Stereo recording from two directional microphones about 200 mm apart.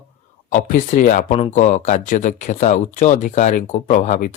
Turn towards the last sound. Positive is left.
turn(degrees=40)  # may be behind; listen again after turning